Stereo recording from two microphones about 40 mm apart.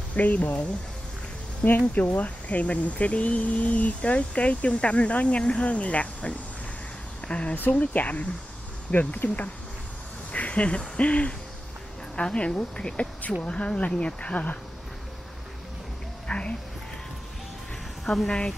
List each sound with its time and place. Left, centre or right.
0.1 s speech: left
1.8 s speech: left
10.3 s a sound: left
11.0 s speech: left
16.3 s speech: left
18.0 s speech: centre